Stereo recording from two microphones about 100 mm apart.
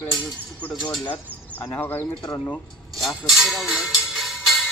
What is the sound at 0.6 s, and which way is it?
Speech, 15° left (ahead or behind).